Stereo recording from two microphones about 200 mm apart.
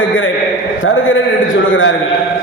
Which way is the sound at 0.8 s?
80° left.